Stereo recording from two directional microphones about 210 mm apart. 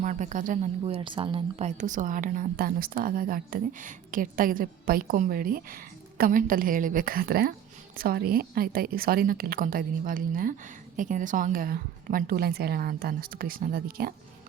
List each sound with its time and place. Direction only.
0.0 s a woman's voice: 35° right (ahead or behind)